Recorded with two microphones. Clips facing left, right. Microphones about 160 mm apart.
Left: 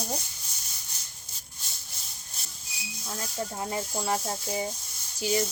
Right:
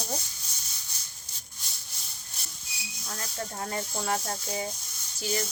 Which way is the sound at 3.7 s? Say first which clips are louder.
Left 1 dB; 10° left (ahead or behind).